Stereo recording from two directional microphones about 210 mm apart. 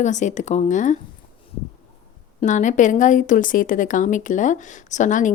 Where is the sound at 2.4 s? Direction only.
35° left (ahead or behind).